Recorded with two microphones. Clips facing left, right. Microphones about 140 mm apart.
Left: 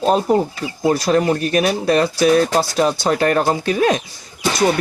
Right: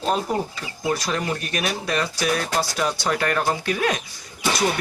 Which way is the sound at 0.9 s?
35° left (ahead or behind).